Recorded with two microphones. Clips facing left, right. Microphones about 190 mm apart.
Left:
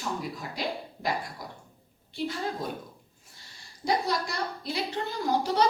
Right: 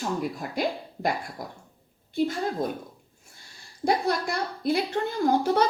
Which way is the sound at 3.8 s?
55° right (ahead or behind).